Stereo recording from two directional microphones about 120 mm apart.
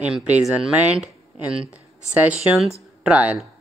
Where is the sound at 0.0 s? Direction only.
10° right (ahead or behind).